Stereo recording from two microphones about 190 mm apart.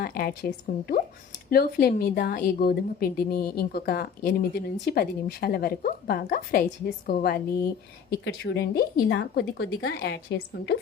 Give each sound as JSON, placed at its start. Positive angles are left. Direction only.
{"t": 0.0, "sound": "a woman's voice", "side_deg": 50}
{"t": 7.4, "sound": "speech", "side_deg": 15}
{"t": 8.2, "sound": "a woman's voice", "side_deg": 60}
{"t": 9.1, "sound": "a woman's voice", "side_deg": 75}